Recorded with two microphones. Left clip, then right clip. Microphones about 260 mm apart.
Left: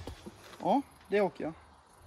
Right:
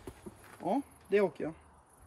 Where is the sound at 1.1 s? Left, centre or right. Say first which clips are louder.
Even; centre.